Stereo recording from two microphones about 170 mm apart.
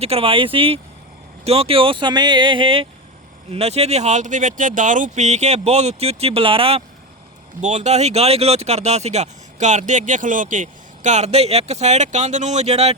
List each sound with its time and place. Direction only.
0.0 s speech: 35° right (ahead or behind)